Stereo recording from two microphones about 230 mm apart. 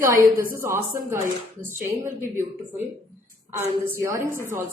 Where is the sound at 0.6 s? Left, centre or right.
Centre.